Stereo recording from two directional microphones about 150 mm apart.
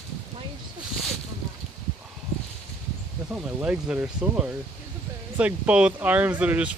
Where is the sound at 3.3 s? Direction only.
10° right (ahead or behind).